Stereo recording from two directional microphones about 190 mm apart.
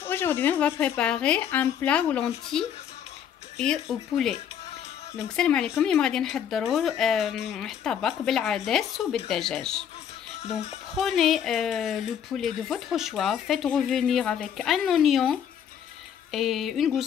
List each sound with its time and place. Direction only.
0.0 s a woman's voice: 10° left (ahead or behind)
10.4 s speech: 35° left (ahead or behind)
11.0 s speech: centre (ahead or behind)